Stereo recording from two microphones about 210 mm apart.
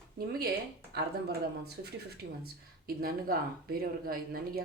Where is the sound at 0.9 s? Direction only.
50° right (ahead or behind).